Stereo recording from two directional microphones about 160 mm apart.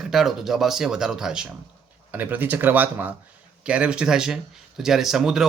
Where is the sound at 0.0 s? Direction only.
Centre (ahead or behind).